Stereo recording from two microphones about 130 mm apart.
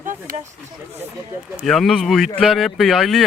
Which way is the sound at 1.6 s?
Centre (ahead or behind).